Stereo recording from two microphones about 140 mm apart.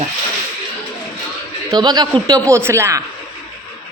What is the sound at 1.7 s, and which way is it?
Speech, 30° right (ahead or behind).